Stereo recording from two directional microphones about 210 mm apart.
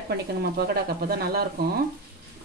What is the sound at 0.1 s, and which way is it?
Speech, 50° right (ahead or behind).